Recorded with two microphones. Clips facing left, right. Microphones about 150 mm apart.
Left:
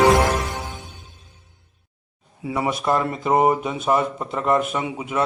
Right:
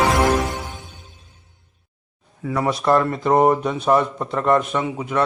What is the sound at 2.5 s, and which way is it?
Speech, 5° left (ahead or behind).